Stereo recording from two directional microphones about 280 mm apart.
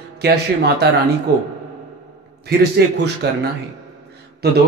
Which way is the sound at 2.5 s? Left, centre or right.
Right.